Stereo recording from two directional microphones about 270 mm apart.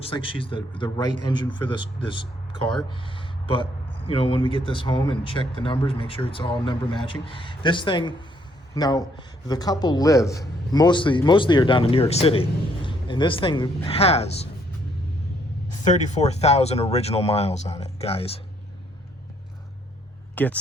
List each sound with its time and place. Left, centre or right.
0.0 s speech: centre
15.9 s speech: left
20.3 s speech: centre